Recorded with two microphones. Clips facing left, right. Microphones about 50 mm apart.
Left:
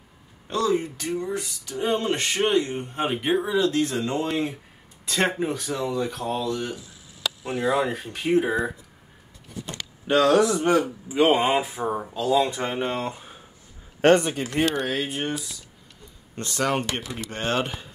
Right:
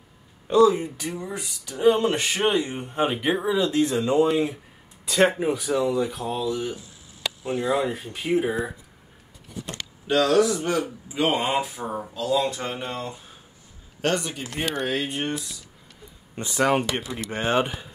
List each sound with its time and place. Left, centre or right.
0.5 s speech: centre
4.3 s speech: centre
10.0 s a man's voice: centre
11.1 s speech: centre
12.8 s a man's voice: left
14.6 s speech: centre
16.3 s speech: centre